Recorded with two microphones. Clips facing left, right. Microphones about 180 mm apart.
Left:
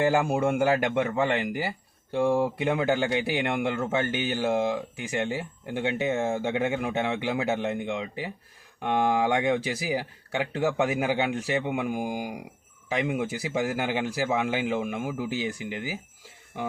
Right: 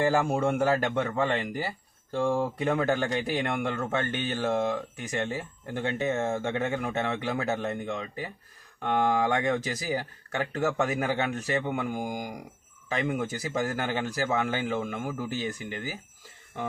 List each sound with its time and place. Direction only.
0.0 s a man's voice: 10° left (ahead or behind)